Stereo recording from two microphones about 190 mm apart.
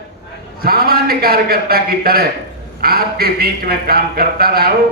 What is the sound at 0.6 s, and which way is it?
A man's voice, 55° right (ahead or behind).